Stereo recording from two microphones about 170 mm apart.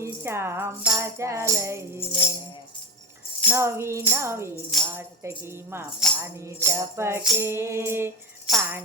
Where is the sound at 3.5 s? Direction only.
15° right (ahead or behind).